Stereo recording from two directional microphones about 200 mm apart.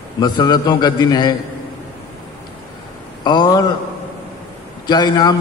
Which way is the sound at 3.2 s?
20° left (ahead or behind).